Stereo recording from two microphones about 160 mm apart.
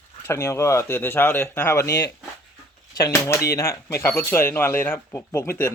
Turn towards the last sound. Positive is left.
turn(degrees=15)  # may be behind; listen again after turning